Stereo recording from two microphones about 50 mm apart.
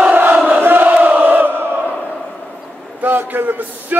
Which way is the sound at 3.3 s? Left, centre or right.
Right.